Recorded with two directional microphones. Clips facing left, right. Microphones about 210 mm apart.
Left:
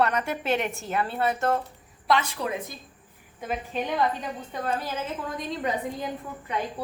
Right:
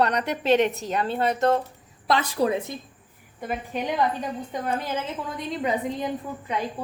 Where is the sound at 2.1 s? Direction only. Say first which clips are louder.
Right 4 dB; 35° right (ahead or behind).